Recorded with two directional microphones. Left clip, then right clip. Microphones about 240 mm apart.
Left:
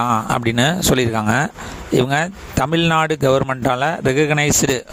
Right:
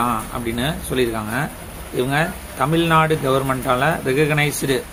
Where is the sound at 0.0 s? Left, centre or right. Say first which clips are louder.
Left 4 dB; left.